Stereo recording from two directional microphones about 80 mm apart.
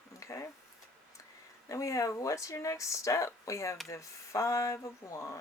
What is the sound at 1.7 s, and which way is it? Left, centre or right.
Speech, left.